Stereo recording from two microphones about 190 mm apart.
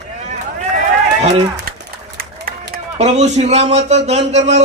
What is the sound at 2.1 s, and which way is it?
Run, 50° right (ahead or behind).